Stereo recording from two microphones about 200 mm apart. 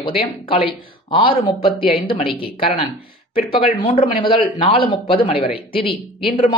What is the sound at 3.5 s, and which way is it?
Speech, 25° left (ahead or behind).